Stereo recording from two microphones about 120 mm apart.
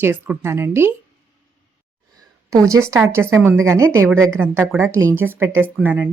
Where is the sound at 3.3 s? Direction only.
20° right (ahead or behind).